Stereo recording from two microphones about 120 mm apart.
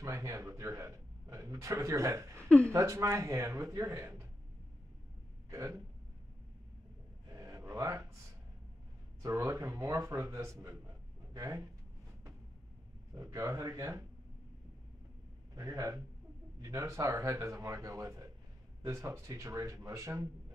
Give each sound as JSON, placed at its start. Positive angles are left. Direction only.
{"t": 0.0, "sound": "speech", "side_deg": -25}
{"t": 2.4, "sound": "speech", "side_deg": 10}
{"t": 2.7, "sound": "speech", "side_deg": -25}
{"t": 5.5, "sound": "hiccup", "side_deg": -25}
{"t": 7.3, "sound": "a sound", "side_deg": -25}
{"t": 9.2, "sound": "speech", "side_deg": -25}
{"t": 13.1, "sound": "speech", "side_deg": -25}
{"t": 15.5, "sound": "speech", "side_deg": -30}